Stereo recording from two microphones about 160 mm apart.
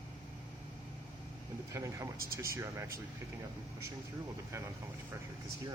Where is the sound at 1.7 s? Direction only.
20° right (ahead or behind).